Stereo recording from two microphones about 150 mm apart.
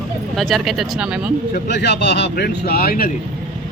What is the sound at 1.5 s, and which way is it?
Speech, 90° left.